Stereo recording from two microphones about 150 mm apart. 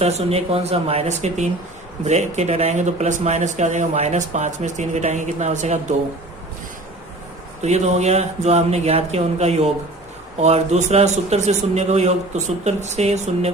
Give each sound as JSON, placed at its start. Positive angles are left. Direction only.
{"t": 0.0, "sound": "speech", "side_deg": -40}
{"t": 7.6, "sound": "speech", "side_deg": -45}